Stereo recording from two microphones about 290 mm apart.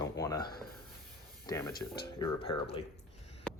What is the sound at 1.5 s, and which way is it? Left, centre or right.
Speech, centre.